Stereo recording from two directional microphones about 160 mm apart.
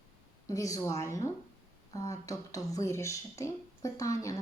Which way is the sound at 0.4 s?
20° left (ahead or behind).